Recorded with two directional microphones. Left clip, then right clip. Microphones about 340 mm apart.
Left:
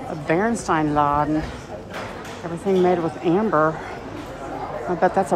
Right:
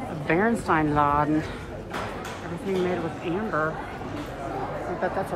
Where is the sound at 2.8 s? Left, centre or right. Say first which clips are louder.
Left 8 dB; centre.